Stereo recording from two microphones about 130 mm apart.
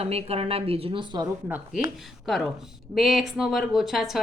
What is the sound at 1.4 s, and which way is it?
Speech, 10° right (ahead or behind).